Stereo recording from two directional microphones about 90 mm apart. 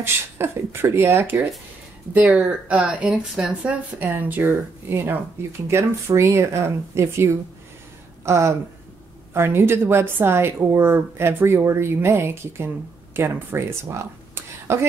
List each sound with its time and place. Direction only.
0.0 s a woman's voice: 25° right (ahead or behind)
2.2 s speech: 15° right (ahead or behind)
3.1 s speech: 5° right (ahead or behind)
3.6 s a woman's voice: 20° right (ahead or behind)